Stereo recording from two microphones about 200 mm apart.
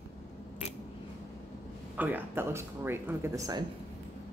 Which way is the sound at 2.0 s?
10° right (ahead or behind).